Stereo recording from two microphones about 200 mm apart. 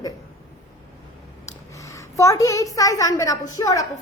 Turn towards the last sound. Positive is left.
turn(degrees=15)  # may be behind; listen again after turning